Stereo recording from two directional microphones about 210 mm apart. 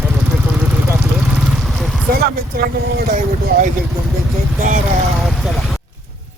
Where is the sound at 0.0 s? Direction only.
5° right (ahead or behind).